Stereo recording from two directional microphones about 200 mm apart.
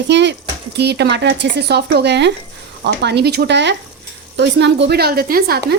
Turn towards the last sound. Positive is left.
turn(degrees=-50)  # may be behind; listen again after turning